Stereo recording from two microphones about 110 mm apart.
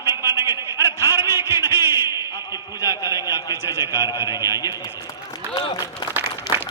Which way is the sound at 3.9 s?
30° left (ahead or behind).